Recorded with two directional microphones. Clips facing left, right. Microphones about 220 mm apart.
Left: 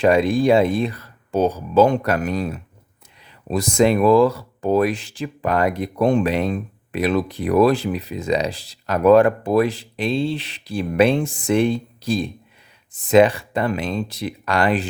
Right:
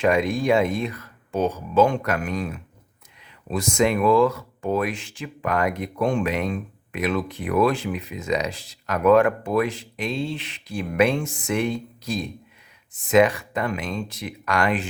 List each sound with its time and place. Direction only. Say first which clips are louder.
0.0 s speech: left 5 dB; 30° left (ahead or behind)